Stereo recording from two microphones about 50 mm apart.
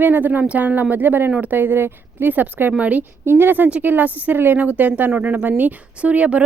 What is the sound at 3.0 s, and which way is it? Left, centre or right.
Speech, right.